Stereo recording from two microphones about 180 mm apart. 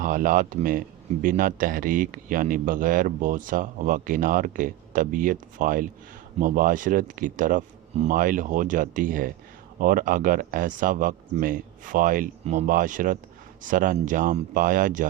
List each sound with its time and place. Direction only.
0.0 s a man's voice: 50° right (ahead or behind)